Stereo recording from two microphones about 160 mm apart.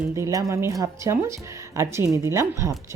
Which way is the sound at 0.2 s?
20° right (ahead or behind).